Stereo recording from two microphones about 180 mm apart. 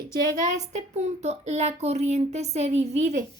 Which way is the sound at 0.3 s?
40° right (ahead or behind).